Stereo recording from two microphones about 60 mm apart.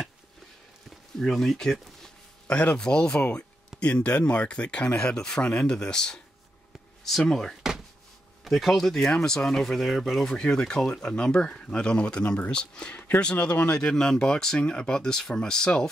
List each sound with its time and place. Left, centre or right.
1.2 s speech: centre
2.8 s speech: centre